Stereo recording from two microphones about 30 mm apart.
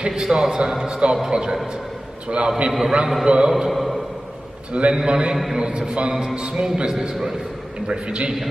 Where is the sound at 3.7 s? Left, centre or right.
Centre.